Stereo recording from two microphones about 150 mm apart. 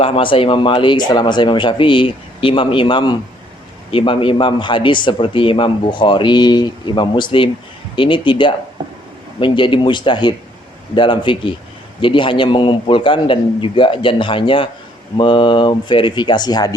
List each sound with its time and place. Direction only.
0.0 s speech: 35° left (ahead or behind)